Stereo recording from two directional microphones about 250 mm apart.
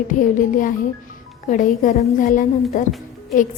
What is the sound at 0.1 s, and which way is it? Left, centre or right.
A woman's voice, left.